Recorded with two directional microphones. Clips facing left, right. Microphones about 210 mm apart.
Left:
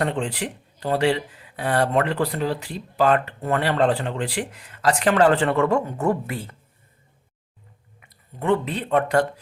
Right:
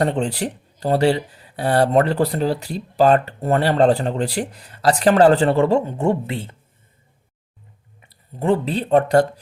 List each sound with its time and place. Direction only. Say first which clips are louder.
0.0 s speech: right 4 dB; 40° right (ahead or behind)
8.0 s speech: right 3 dB; 30° right (ahead or behind)